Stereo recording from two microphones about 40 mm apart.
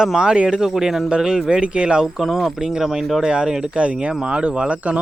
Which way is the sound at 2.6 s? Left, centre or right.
Centre.